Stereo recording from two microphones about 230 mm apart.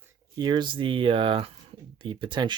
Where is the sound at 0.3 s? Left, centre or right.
Centre.